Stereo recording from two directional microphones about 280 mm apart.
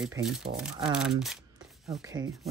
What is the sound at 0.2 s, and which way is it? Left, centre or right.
Speech, centre.